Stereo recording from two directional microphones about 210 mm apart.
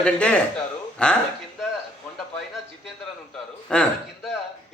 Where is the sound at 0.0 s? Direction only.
5° left (ahead or behind).